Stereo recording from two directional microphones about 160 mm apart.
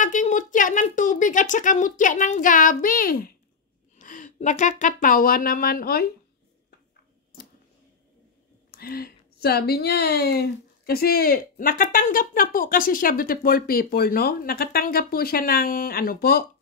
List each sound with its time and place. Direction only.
0.0 s a woman's voice: 50° left (ahead or behind)
4.0 s speech: 50° left (ahead or behind); by 6.0 s 65° left (ahead or behind)
8.7 s speech: 70° left (ahead or behind)
10.9 s speech: 70° left (ahead or behind)